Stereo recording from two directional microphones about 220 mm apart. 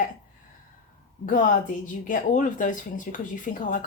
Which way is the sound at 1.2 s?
35° left (ahead or behind).